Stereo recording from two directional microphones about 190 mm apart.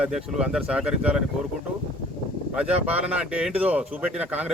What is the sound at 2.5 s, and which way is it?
Speech, 5° right (ahead or behind).